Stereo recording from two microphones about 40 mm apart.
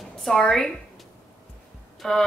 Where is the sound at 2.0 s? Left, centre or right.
Centre.